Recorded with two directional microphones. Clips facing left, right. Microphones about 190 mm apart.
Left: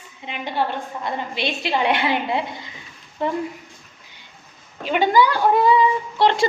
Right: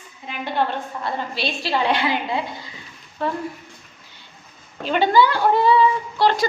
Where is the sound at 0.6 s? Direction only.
20° left (ahead or behind).